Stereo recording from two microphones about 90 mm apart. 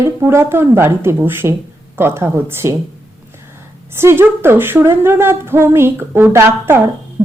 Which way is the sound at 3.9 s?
30° right (ahead or behind).